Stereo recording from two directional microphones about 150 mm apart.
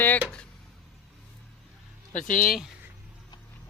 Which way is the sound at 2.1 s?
55° left (ahead or behind).